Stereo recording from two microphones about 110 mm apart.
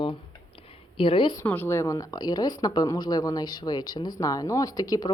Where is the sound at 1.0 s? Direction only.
55° left (ahead or behind).